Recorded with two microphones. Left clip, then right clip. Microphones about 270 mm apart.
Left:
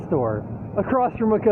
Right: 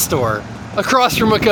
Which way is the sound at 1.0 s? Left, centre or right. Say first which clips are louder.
Right 7 dB; right.